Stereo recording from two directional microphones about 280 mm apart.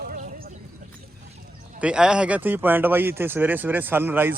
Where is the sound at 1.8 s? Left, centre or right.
Centre.